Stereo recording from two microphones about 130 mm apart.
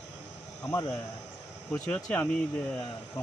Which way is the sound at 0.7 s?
20° left (ahead or behind).